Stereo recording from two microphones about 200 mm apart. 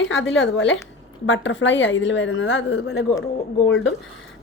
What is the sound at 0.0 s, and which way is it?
A woman's voice, 70° left (ahead or behind).